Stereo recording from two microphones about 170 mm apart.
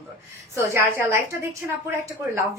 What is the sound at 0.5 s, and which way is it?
A woman's voice, 15° right (ahead or behind).